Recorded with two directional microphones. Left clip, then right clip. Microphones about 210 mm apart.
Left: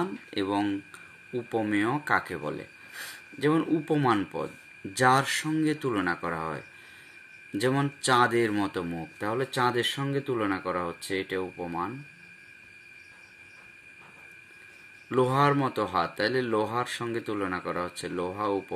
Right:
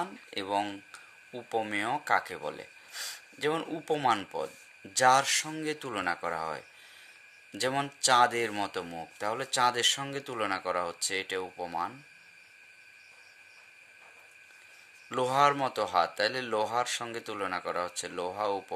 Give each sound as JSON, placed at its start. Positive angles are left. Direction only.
{"t": 0.0, "sound": "speech", "side_deg": -40}
{"t": 15.0, "sound": "speech", "side_deg": -45}